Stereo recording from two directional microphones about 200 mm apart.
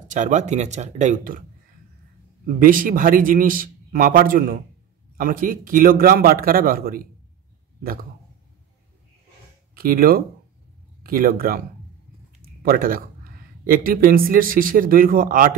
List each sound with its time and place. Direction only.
0.1 s speech: 40° right (ahead or behind)
2.4 s a man's voice: 45° right (ahead or behind)
9.8 s a man's voice: 45° right (ahead or behind)
12.4 s a sound: 45° right (ahead or behind)
13.7 s a man's voice: 45° right (ahead or behind)